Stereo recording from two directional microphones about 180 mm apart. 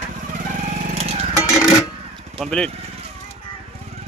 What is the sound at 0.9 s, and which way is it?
Vehicle, 35° right (ahead or behind).